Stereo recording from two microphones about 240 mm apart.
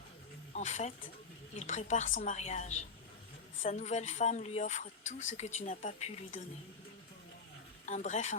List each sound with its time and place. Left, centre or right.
0.5 s speech: left
7.9 s speech: left